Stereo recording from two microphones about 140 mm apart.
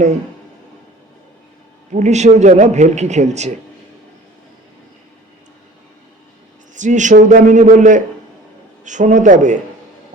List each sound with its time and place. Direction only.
1.9 s a man's voice: 55° right (ahead or behind)
6.7 s a man's voice: 60° right (ahead or behind)